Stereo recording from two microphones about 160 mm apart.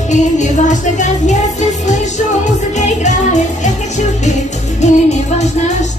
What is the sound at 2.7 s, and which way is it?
Music, 45° left (ahead or behind).